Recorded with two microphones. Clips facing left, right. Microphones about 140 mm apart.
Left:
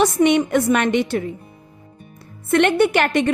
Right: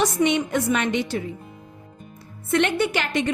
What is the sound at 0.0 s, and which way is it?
A woman's voice, 60° left (ahead or behind).